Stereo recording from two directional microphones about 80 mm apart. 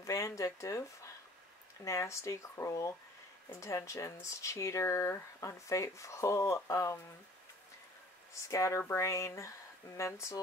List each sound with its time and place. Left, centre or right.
0.0 s a sound: left
1.9 s speech: left
8.4 s speech: left